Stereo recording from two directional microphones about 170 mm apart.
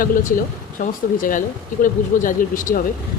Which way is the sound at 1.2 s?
50° left (ahead or behind).